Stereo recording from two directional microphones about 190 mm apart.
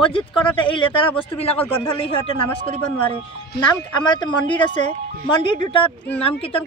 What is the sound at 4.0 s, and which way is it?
Speech, 25° left (ahead or behind).